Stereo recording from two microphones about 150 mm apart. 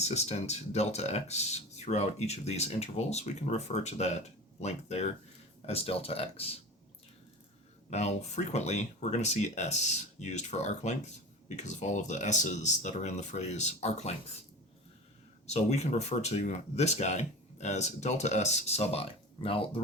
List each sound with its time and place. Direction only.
0.0 s speech: 45° left (ahead or behind)
7.9 s speech: 50° left (ahead or behind)
15.4 s speech: 50° left (ahead or behind)